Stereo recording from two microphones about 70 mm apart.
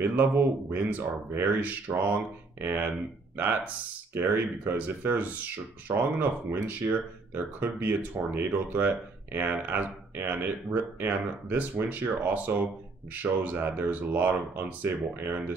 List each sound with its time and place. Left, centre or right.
0.0 s speech: right